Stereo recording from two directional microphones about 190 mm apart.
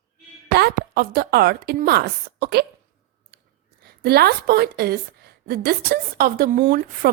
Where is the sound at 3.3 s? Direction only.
55° right (ahead or behind).